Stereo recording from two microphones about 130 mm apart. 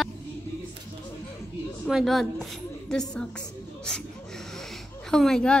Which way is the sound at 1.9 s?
Centre (ahead or behind).